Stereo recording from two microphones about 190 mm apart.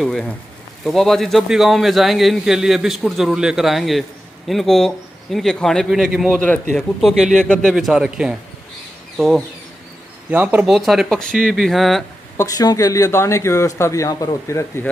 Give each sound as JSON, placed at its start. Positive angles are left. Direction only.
{"t": 0.0, "sound": "a man's voice", "side_deg": 0}
{"t": 12.4, "sound": "speech", "side_deg": 20}